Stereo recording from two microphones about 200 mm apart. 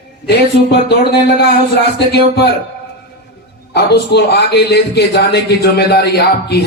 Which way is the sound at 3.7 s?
55° left (ahead or behind).